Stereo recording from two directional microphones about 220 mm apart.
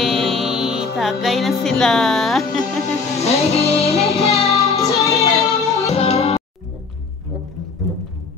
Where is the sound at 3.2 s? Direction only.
30° left (ahead or behind).